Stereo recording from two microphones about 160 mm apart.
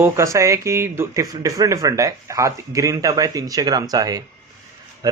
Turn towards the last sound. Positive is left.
turn(degrees=-25)  # may be behind; listen again after turning